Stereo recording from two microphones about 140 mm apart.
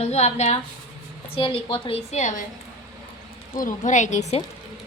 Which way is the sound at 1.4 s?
40° left (ahead or behind).